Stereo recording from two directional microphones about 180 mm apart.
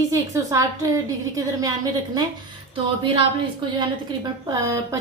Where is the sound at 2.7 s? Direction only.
30° right (ahead or behind).